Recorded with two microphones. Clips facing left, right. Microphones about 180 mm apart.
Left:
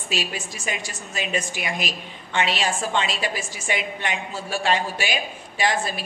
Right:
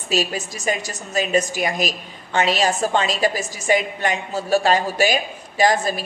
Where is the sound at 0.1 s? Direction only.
40° right (ahead or behind).